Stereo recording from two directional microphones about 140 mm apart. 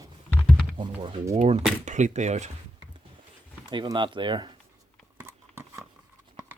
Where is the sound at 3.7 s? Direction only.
35° right (ahead or behind).